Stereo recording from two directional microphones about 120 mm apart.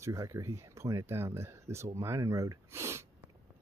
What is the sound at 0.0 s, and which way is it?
Speech, 25° right (ahead or behind).